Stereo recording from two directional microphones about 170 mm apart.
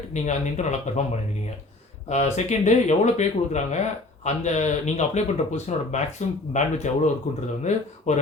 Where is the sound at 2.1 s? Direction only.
40° left (ahead or behind).